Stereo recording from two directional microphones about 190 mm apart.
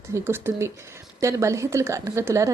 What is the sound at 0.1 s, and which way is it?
A woman's voice, 10° right (ahead or behind).